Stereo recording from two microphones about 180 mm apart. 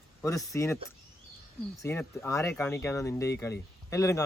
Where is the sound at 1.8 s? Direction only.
15° left (ahead or behind).